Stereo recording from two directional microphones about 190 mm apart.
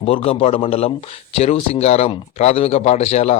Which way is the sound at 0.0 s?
30° left (ahead or behind).